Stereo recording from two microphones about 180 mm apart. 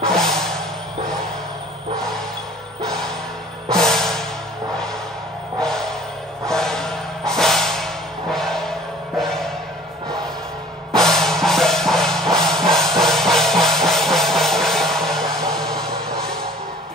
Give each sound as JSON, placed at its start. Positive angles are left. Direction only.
{"t": 0.2, "sound": "music", "side_deg": 0}
{"t": 2.8, "sound": "music", "side_deg": 0}
{"t": 5.6, "sound": "music", "side_deg": 5}
{"t": 10.9, "sound": "music", "side_deg": 0}